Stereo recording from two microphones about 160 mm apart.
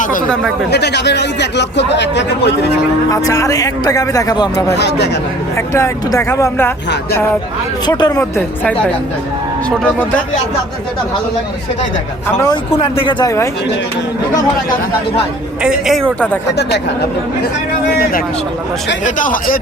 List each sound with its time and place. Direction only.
0.0 s speech: 55° left (ahead or behind)
0.7 s speech: 90° left
3.1 s a man's voice: 20° left (ahead or behind)
4.7 s speech: 90° left
5.5 s speech: 15° left (ahead or behind)
7.9 s a man's voice: 25° left (ahead or behind)
8.2 s speech: 10° left (ahead or behind)
12.7 s speech: 35° left (ahead or behind)
15.6 s speech: centre (ahead or behind)
16.5 s speech: 90° left
17.9 s speech: 65° left (ahead or behind)